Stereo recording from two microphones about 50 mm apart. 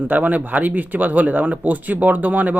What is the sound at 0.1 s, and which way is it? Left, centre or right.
Speech, right.